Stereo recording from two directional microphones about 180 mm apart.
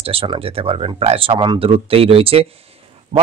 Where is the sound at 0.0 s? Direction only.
30° right (ahead or behind).